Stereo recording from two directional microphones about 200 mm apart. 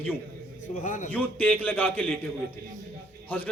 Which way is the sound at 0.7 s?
40° left (ahead or behind).